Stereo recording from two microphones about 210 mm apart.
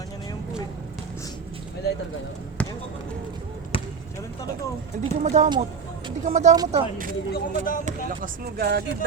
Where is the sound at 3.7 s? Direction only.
25° left (ahead or behind).